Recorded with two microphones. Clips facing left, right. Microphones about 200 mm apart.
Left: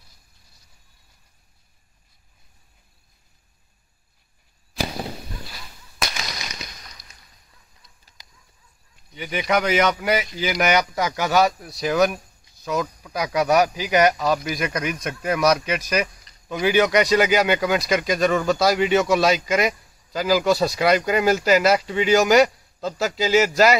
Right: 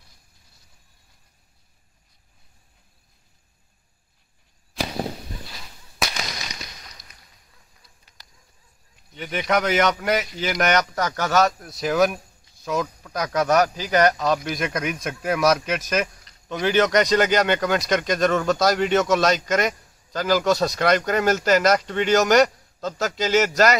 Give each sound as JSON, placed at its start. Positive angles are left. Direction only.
{"t": 8.2, "sound": "a sound", "side_deg": 10}
{"t": 9.1, "sound": "speech", "side_deg": 5}
{"t": 11.6, "sound": "speech", "side_deg": 0}